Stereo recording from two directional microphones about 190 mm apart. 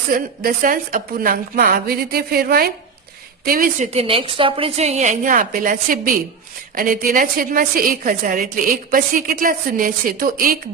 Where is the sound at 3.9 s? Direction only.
30° right (ahead or behind).